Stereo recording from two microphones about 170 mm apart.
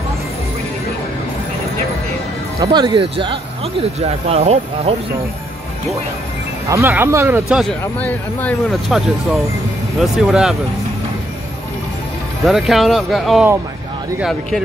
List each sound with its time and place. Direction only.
2.6 s speech: 25° right (ahead or behind)
6.7 s speech: 15° right (ahead or behind)
7.8 s speech: 10° left (ahead or behind)
12.4 s speech: centre (ahead or behind)